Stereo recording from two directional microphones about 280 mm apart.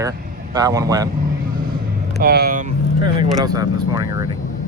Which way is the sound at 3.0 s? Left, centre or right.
Centre.